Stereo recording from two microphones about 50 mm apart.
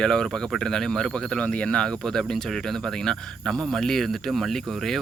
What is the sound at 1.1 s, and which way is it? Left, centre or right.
Speech, centre.